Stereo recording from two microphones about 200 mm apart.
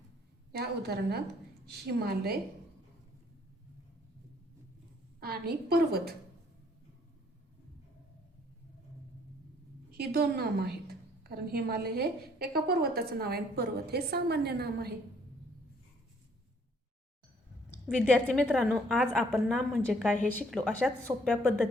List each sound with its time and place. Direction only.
0.5 s a woman's voice: 50° right (ahead or behind)
5.2 s a woman's voice: 50° right (ahead or behind)
9.9 s a woman's voice: 50° right (ahead or behind)
17.8 s a woman's voice: centre (ahead or behind)